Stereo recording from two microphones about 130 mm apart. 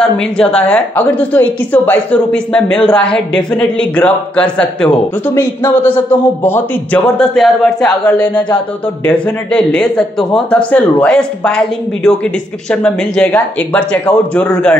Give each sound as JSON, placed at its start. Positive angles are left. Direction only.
{"t": 0.0, "sound": "a woman's voice", "side_deg": 5}
{"t": 7.2, "sound": "a woman's voice", "side_deg": 0}